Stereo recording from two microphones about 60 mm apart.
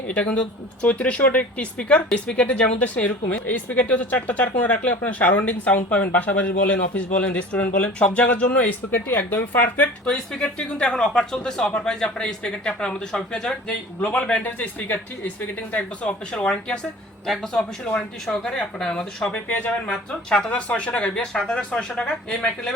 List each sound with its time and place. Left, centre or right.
0.1 s speech: left
10.1 s speech: centre
14.0 s speech: left
19.5 s speech: left
19.9 s speech: centre